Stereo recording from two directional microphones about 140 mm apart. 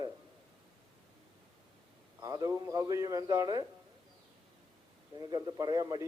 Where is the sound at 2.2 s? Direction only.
25° right (ahead or behind).